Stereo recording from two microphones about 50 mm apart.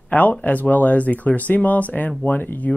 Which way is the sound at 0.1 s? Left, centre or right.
Left.